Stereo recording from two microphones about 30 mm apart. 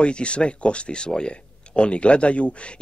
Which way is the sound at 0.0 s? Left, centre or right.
Left.